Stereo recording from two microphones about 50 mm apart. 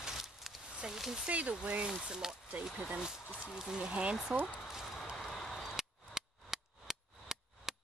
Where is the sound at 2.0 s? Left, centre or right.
Centre.